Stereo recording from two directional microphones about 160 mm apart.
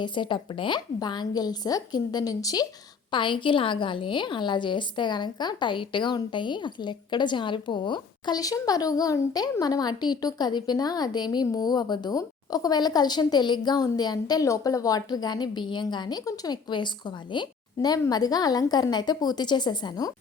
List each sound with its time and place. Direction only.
0.0 s a woman's voice: 30° left (ahead or behind)